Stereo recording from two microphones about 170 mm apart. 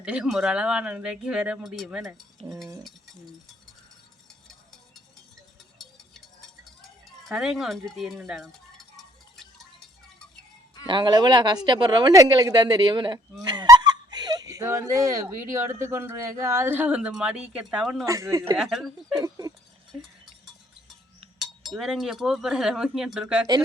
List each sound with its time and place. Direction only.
0.0 s speech: 5° right (ahead or behind)
7.3 s speech: centre (ahead or behind)
10.8 s speech: 25° right (ahead or behind); by 18.0 s 5° right (ahead or behind)
18.0 s speech: 20° right (ahead or behind)
18.5 s speech: centre (ahead or behind)
19.2 s a sound: 20° right (ahead or behind)
21.4 s speech: centre (ahead or behind)